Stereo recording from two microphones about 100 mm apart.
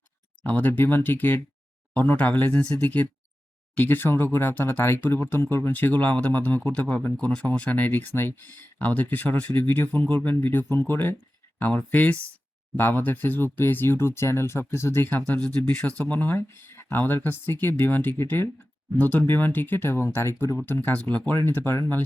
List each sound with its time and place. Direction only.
0.4 s speech: 15° left (ahead or behind)